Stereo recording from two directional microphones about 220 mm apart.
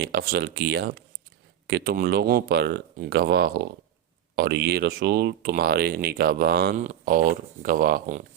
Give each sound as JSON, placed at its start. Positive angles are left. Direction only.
{"t": 0.0, "sound": "speech", "side_deg": -45}